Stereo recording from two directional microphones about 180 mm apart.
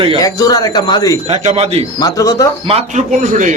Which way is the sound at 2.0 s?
20° left (ahead or behind).